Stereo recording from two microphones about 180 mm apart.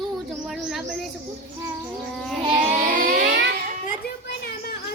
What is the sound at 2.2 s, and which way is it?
Speech, centre (ahead or behind).